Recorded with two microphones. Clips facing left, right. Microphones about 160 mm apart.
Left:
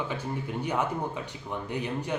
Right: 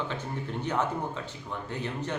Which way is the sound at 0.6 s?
10° left (ahead or behind).